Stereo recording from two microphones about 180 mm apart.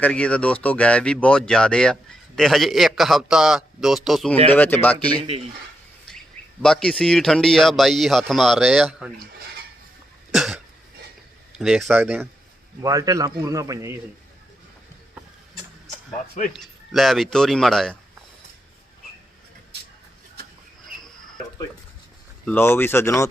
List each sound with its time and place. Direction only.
0.0 s speech: 5° left (ahead or behind)
4.5 s speech: 10° left (ahead or behind)
6.6 s speech: 5° left (ahead or behind)
10.3 s cough: centre (ahead or behind)
11.5 s speech: 5° right (ahead or behind)
16.5 s speech: centre (ahead or behind)
22.4 s speech: 10° left (ahead or behind)